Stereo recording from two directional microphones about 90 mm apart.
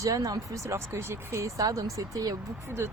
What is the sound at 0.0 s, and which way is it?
Speech, 40° right (ahead or behind).